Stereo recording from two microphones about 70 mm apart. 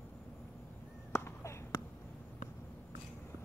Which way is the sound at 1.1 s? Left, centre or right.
Left.